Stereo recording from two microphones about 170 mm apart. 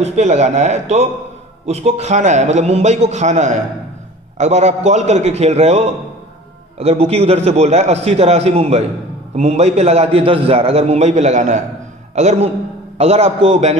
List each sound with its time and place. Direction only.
0.0 s a man's voice: 40° right (ahead or behind)